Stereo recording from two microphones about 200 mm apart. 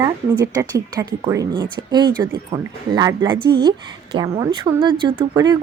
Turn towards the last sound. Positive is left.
turn(degrees=-20)  # may be behind; listen again after turning